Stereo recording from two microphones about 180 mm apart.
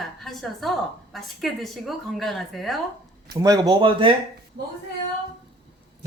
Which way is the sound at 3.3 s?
20° right (ahead or behind).